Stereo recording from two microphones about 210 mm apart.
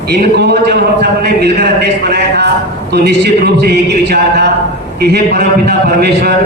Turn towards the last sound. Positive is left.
turn(degrees=-50)  # may be behind; listen again after turning